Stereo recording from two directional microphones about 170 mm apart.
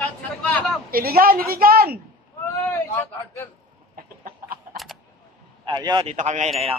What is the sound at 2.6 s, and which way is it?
Speech, 15° left (ahead or behind).